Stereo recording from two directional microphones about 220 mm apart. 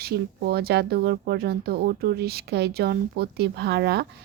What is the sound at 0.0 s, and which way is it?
Speech, 45° right (ahead or behind).